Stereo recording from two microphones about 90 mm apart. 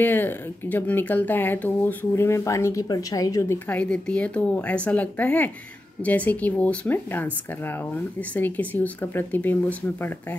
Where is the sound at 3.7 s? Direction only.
10° left (ahead or behind).